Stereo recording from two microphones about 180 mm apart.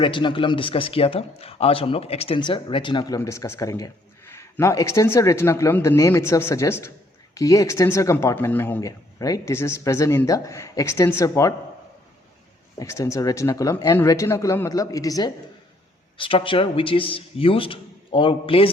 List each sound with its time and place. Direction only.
0.0 s speech: 25° left (ahead or behind)
12.8 s speech: 15° left (ahead or behind)